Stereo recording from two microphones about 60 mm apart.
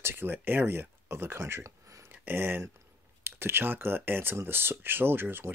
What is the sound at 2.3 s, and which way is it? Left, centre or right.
Speech, right.